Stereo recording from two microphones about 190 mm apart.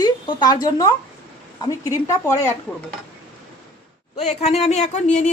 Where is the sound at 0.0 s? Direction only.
20° left (ahead or behind).